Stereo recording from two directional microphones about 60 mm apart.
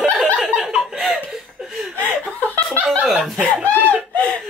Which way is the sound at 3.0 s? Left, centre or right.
Centre.